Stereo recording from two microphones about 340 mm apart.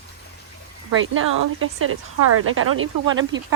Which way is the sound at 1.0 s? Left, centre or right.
Right.